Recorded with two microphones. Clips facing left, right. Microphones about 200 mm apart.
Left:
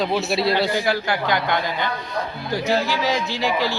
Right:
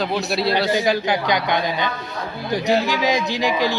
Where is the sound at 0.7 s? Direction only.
20° right (ahead or behind).